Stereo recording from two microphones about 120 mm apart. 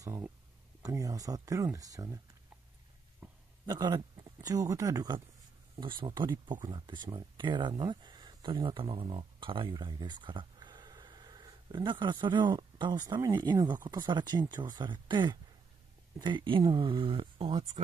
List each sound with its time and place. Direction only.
0.0 s speech: 25° right (ahead or behind)
3.2 s a sound: 10° right (ahead or behind)
3.6 s speech: 35° right (ahead or behind)
5.8 s speech: 45° right (ahead or behind)